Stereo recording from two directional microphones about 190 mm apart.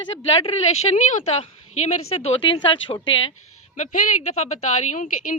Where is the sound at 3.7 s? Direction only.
40° left (ahead or behind).